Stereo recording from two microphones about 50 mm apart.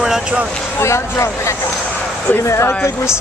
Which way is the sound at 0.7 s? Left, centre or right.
Left.